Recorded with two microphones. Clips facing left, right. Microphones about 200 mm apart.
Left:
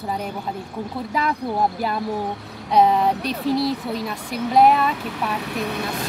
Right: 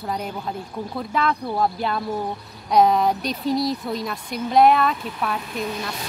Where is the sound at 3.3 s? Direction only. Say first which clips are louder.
Left 1 dB; 70° left (ahead or behind).